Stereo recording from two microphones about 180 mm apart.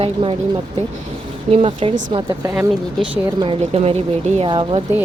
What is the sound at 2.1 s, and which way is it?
Speech, 20° right (ahead or behind).